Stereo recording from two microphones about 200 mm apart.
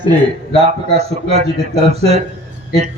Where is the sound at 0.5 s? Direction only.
30° right (ahead or behind).